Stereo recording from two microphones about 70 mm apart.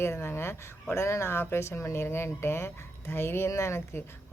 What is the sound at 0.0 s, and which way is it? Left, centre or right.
A woman's voice, left.